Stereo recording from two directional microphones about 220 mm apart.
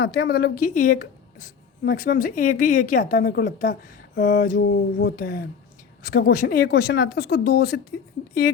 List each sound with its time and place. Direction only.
0.0 s a woman's voice: 45° left (ahead or behind)